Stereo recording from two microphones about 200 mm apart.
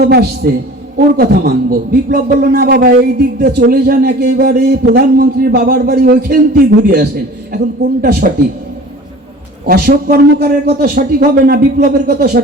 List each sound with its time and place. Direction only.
0.0 s a man's voice: 55° right (ahead or behind)
9.6 s a man's voice: 50° right (ahead or behind)